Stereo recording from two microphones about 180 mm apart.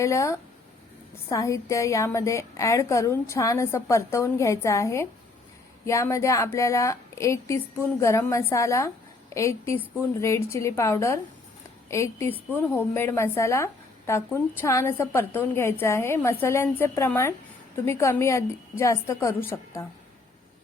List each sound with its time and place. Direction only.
0.0 s a woman's voice: 15° left (ahead or behind)